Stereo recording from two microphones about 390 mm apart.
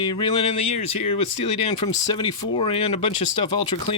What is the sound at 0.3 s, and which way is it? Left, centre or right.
Speech, centre.